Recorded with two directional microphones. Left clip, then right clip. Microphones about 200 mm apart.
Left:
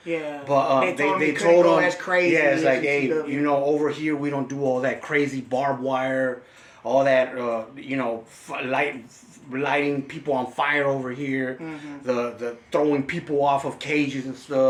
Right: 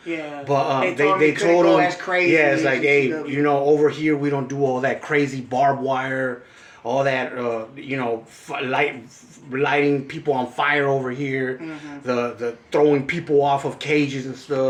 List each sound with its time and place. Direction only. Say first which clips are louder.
0.4 s speech: even; 10° right (ahead or behind)
1.6 s speech: right 2 dB; 20° left (ahead or behind)
2.3 s speech: right 3 dB; 10° right (ahead or behind)